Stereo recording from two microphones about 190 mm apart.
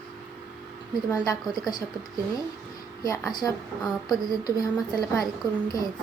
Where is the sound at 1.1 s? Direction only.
20° left (ahead or behind).